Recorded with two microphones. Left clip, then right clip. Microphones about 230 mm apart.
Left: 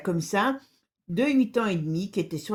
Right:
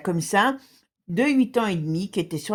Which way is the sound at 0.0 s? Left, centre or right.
Right.